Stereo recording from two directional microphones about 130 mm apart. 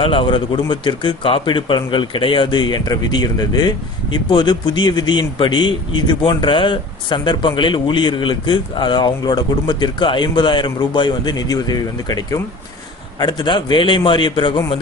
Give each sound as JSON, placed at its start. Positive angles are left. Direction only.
{"t": 0.0, "sound": "speech", "side_deg": 40}